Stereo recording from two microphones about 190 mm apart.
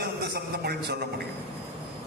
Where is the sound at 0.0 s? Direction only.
55° right (ahead or behind).